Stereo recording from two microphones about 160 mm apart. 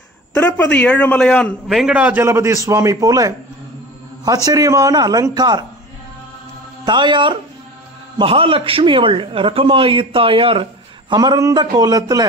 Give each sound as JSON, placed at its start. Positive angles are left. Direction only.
{"t": 0.3, "sound": "a man's voice", "side_deg": 10}
{"t": 4.5, "sound": "a man's voice", "side_deg": -20}
{"t": 6.8, "sound": "a man's voice", "side_deg": -30}